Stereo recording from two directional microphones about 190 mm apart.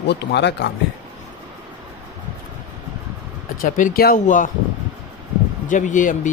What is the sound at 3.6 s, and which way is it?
Speech, 50° left (ahead or behind).